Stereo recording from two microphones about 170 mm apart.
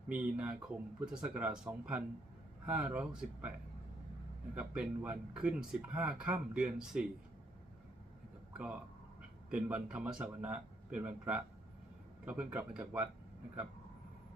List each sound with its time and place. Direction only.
0.1 s a man's voice: 5° right (ahead or behind)
4.5 s speech: 5° right (ahead or behind)
9.5 s a man's voice: 5° right (ahead or behind)